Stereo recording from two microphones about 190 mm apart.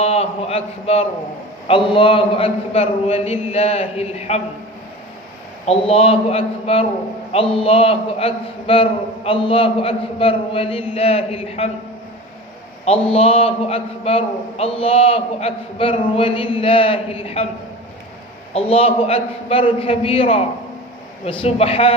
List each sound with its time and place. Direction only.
0.0 s a man's voice: 30° left (ahead or behind)
5.6 s a man's voice: 30° left (ahead or behind)
12.8 s a man's voice: 30° left (ahead or behind)
18.5 s a man's voice: 30° left (ahead or behind)
21.4 s a man's voice: 30° left (ahead or behind)